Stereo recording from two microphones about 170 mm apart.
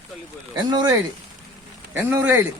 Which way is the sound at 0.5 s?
25° right (ahead or behind).